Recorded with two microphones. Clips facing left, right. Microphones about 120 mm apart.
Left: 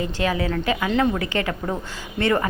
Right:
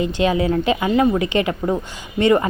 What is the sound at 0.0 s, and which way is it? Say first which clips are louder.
A woman's voice: right 5 dB; 20° right (ahead or behind).